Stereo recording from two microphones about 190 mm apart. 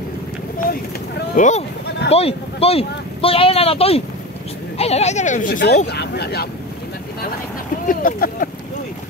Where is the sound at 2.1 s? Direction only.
30° left (ahead or behind); by 6.5 s 55° left (ahead or behind).